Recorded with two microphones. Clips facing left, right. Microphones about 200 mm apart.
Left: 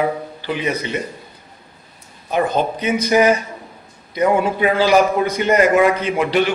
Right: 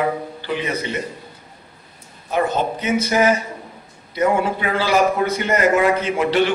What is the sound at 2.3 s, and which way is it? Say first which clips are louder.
A man's voice: left 2 dB; 15° left (ahead or behind).